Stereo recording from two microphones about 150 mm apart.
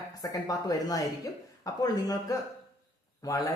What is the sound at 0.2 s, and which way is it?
Speech, 25° left (ahead or behind).